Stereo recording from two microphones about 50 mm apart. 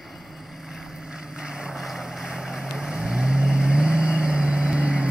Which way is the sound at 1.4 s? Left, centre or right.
Centre.